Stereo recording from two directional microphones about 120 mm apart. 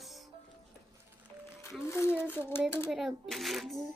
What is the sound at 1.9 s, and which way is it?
Speech, 20° left (ahead or behind).